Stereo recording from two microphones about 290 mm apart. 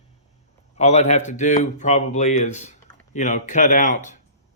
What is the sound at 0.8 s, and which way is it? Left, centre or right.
Speech, left.